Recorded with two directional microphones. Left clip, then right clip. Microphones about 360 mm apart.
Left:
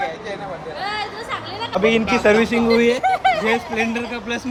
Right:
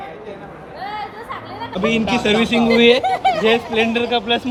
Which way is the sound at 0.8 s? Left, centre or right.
Left.